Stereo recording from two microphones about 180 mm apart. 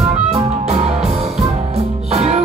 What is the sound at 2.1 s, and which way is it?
Music, 35° right (ahead or behind).